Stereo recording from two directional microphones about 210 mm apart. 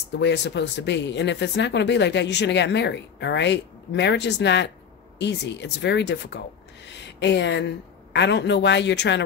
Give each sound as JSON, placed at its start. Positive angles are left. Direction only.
{"t": 0.2, "sound": "speech", "side_deg": 55}